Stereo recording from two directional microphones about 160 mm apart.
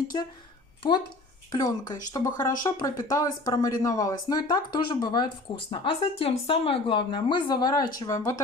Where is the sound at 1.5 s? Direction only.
25° left (ahead or behind).